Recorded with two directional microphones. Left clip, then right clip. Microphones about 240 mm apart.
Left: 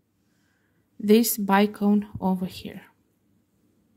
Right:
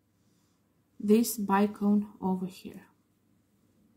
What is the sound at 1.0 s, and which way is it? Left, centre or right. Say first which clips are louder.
A woman's voice: left 6 dB; left.